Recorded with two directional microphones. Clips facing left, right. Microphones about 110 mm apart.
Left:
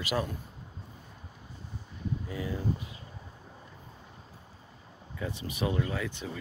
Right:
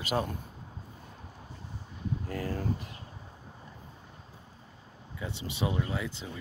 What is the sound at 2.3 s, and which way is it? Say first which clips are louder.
Speech: right 1 dB; 55° right (ahead or behind).